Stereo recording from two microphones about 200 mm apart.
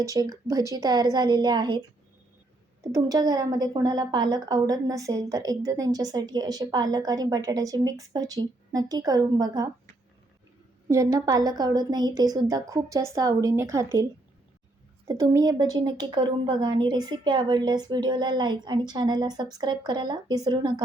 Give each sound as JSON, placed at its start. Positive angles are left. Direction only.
{"t": 0.0, "sound": "a woman's voice", "side_deg": -15}
{"t": 2.8, "sound": "a woman's voice", "side_deg": -15}
{"t": 10.8, "sound": "a woman's voice", "side_deg": -15}